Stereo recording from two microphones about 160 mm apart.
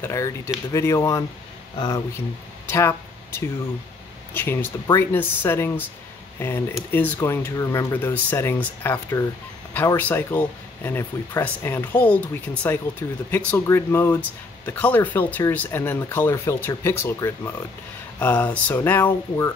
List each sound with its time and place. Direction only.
0.0 s speech: 20° left (ahead or behind)
2.7 s speech: 15° left (ahead or behind)